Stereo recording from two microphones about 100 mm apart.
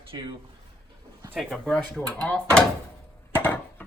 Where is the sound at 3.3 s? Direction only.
20° left (ahead or behind).